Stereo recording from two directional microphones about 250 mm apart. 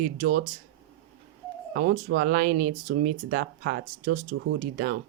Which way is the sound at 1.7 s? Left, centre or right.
Right.